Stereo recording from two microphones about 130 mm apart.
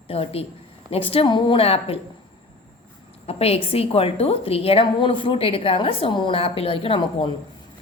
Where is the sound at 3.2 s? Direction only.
50° left (ahead or behind).